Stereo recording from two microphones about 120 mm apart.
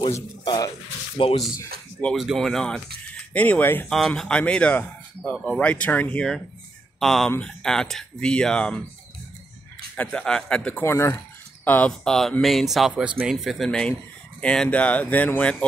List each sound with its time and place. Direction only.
0.1 s speech: 35° left (ahead or behind)
1.2 s speech: 50° left (ahead or behind)
2.1 s speech: centre (ahead or behind)
3.9 s speech: 5° left (ahead or behind)
9.9 s speech: 5° left (ahead or behind)